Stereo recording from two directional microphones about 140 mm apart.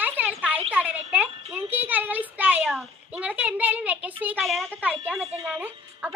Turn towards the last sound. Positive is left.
turn(degrees=-15)  # may be behind; listen again after turning